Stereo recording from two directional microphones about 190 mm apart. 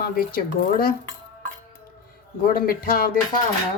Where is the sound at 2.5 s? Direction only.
50° left (ahead or behind).